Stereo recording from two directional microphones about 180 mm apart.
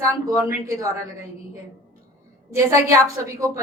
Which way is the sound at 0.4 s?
15° right (ahead or behind).